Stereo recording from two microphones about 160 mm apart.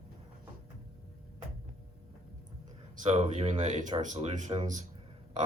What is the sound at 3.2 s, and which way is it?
Speech, 45° right (ahead or behind).